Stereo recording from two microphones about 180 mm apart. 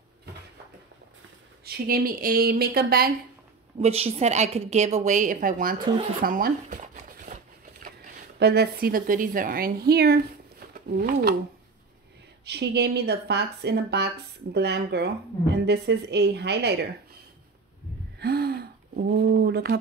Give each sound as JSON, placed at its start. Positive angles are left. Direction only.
{"t": 1.6, "sound": "a woman's voice", "side_deg": -55}
{"t": 3.8, "sound": "a woman's voice", "side_deg": -35}
{"t": 6.2, "sound": "a sound", "side_deg": -50}
{"t": 8.4, "sound": "a woman's voice", "side_deg": -65}
{"t": 12.4, "sound": "speech", "side_deg": -65}
{"t": 18.2, "sound": "speech", "side_deg": -60}